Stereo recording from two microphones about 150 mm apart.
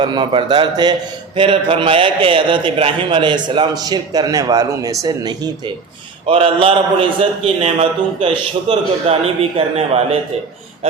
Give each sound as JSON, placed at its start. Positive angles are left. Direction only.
{"t": 0.0, "sound": "a man's voice", "side_deg": -30}